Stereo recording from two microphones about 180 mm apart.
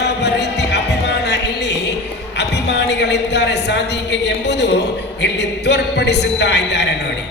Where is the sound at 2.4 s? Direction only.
75° left (ahead or behind).